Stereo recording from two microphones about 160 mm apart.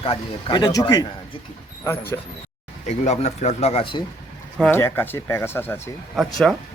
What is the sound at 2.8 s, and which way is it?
Speech, 45° left (ahead or behind).